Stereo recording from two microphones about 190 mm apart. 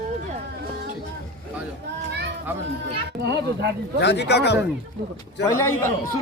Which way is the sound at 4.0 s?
60° left (ahead or behind).